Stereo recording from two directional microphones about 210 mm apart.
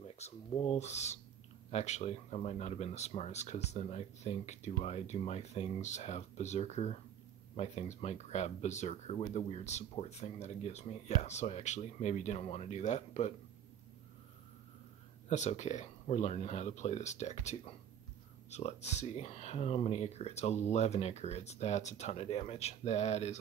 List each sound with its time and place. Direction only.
0.1 s speech: 30° left (ahead or behind)
15.2 s speech: 35° left (ahead or behind)